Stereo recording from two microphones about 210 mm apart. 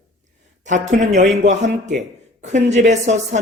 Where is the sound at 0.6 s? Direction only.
35° right (ahead or behind).